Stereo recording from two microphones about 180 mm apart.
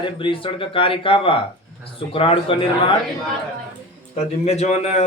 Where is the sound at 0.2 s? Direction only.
30° left (ahead or behind).